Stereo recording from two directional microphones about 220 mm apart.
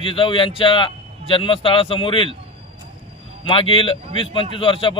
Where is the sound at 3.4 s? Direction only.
25° left (ahead or behind).